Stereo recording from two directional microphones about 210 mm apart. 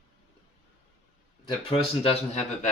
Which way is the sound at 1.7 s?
25° left (ahead or behind).